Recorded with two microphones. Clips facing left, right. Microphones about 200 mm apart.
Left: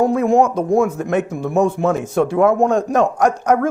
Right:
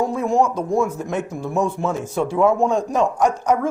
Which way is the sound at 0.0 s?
60° left (ahead or behind).